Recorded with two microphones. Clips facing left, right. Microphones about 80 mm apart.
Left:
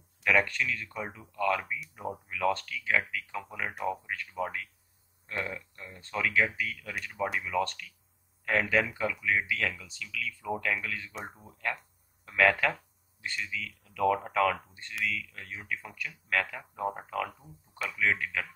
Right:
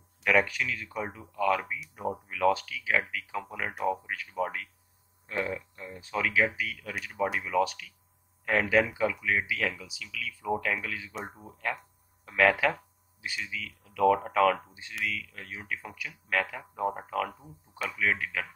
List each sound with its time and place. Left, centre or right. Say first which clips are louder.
0.2 s speech: right 1 dB; centre
17.3 s speech: right 3 dB; centre
17.7 s speech: even; centre